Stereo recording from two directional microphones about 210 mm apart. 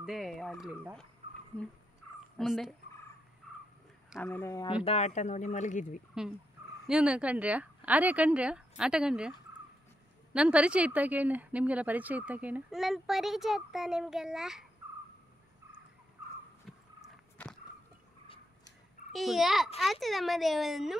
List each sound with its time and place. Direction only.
0.0 s a woman's voice: centre (ahead or behind)
2.3 s a woman's voice: centre (ahead or behind)
4.2 s speech: 10° left (ahead or behind)
4.8 s speech: 30° left (ahead or behind)
6.2 s a woman's voice: 5° right (ahead or behind)
10.3 s a woman's voice: 5° right (ahead or behind)
16.7 s a sound: centre (ahead or behind)
19.1 s a woman's voice: centre (ahead or behind)